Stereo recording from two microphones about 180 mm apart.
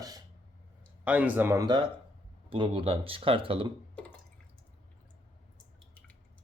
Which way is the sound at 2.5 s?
30° right (ahead or behind).